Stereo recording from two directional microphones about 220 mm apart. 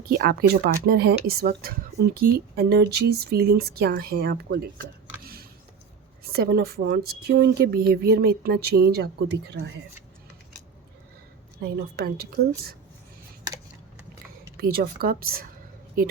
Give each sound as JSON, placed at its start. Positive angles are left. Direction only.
{"t": 0.1, "sound": "speech", "side_deg": -45}
{"t": 5.2, "sound": "a sound", "side_deg": -45}
{"t": 6.3, "sound": "speech", "side_deg": -45}
{"t": 11.6, "sound": "speech", "side_deg": -50}
{"t": 14.6, "sound": "speech", "side_deg": -40}